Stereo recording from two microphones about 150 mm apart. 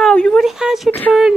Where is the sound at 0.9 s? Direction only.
10° left (ahead or behind).